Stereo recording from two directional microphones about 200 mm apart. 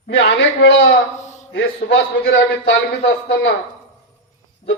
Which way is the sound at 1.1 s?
35° left (ahead or behind).